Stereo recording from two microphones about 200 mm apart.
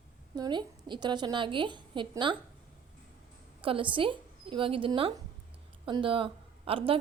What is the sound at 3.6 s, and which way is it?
Speech, 25° right (ahead or behind).